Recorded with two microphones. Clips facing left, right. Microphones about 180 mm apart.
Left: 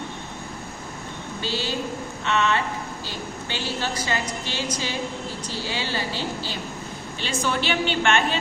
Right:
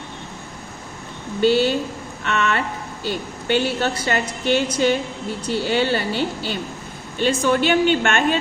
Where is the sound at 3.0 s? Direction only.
60° right (ahead or behind).